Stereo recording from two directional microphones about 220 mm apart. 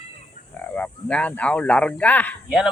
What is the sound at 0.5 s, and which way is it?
Speech, 5° left (ahead or behind).